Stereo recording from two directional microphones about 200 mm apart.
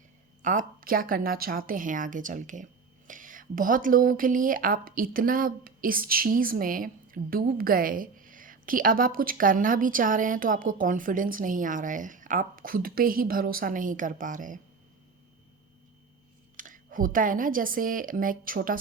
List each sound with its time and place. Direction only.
0.4 s a woman's voice: 45° right (ahead or behind)
16.6 s a woman's voice: 40° right (ahead or behind)